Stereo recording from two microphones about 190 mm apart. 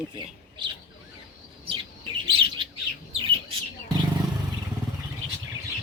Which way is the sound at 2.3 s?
25° right (ahead or behind).